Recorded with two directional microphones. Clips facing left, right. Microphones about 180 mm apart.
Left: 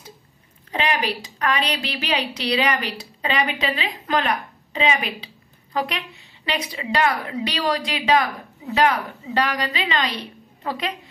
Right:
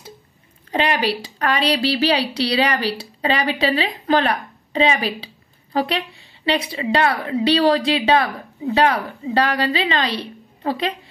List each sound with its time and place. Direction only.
0.7 s a woman's voice: 35° right (ahead or behind)